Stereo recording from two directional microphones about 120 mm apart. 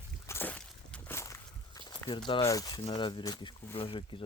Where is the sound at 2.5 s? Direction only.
30° left (ahead or behind); by 4.0 s 45° left (ahead or behind).